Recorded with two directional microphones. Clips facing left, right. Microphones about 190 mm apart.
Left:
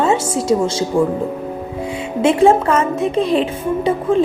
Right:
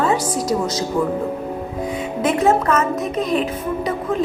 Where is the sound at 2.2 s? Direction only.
30° left (ahead or behind).